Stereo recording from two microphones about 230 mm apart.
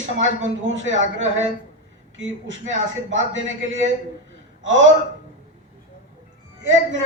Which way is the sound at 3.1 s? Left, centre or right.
Right.